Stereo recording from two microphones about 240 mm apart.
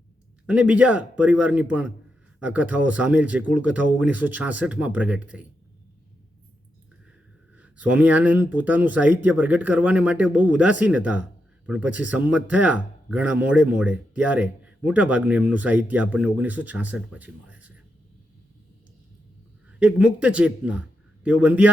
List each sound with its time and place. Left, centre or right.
0.4 s speech: centre
7.6 s speech: centre
19.8 s speech: centre